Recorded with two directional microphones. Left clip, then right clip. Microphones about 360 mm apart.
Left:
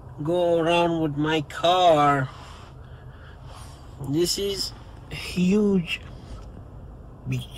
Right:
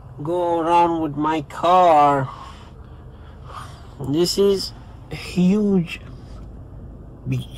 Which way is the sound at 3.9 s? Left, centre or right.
Right.